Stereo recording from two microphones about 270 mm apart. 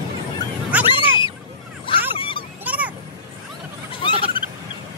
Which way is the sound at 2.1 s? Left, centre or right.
Centre.